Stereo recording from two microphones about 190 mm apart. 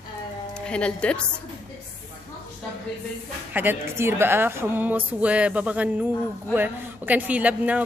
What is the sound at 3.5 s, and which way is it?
Speech, 10° right (ahead or behind).